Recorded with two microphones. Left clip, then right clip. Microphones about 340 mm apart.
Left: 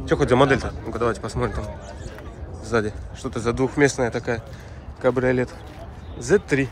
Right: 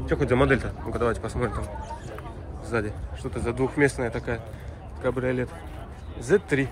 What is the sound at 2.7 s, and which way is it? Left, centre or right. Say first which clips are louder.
Speech: left 5 dB; centre.